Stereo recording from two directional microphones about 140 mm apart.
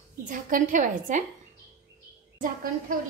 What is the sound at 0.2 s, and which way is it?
A woman's voice, 70° right (ahead or behind).